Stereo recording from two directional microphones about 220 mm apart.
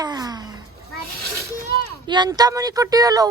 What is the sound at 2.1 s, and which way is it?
Speech, 20° right (ahead or behind).